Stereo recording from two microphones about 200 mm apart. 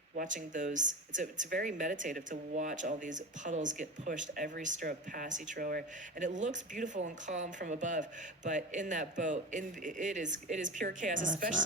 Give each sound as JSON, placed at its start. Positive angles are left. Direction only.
{"t": 0.2, "sound": "speech", "side_deg": -40}